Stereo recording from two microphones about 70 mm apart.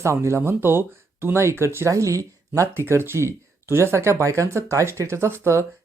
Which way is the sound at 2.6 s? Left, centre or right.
Right.